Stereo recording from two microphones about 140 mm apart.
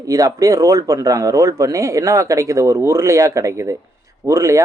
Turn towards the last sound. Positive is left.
turn(degrees=-20)  # may be behind; listen again after turning